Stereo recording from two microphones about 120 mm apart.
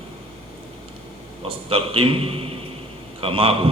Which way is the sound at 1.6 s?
50° right (ahead or behind).